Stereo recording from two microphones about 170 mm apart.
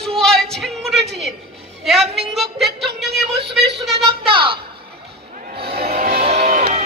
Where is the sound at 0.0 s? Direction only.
5° left (ahead or behind).